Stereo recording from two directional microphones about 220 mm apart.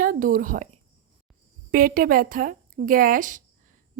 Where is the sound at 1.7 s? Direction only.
40° right (ahead or behind).